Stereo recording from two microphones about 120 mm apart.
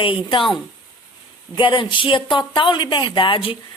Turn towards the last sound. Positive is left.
turn(degrees=45)  # may be behind; listen again after turning